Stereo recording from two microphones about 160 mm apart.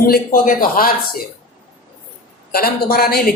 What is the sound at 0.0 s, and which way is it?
Speech, 65° left (ahead or behind).